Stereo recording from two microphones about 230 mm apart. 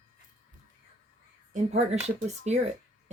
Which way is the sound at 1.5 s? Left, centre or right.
Right.